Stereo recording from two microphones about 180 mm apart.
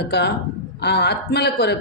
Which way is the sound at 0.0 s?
70° left (ahead or behind).